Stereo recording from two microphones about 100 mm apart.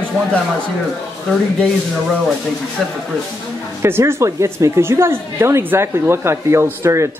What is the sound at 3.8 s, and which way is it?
Speech, 25° right (ahead or behind).